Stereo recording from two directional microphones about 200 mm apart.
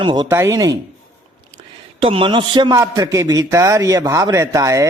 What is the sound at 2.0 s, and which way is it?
A man's voice, 30° right (ahead or behind).